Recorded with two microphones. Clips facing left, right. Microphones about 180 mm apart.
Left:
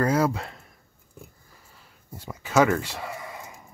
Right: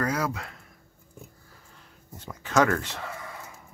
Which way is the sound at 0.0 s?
30° left (ahead or behind).